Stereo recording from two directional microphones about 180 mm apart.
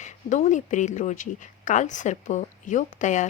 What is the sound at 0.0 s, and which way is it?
Speech, 40° left (ahead or behind).